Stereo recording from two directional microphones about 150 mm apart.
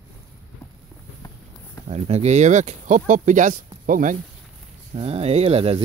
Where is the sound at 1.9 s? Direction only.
45° right (ahead or behind); by 4.2 s 60° right (ahead or behind).